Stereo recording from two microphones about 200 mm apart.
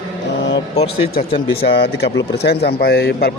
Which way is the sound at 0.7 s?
30° left (ahead or behind).